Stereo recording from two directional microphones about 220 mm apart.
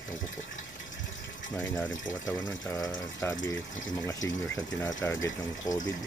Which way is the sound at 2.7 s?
10° left (ahead or behind).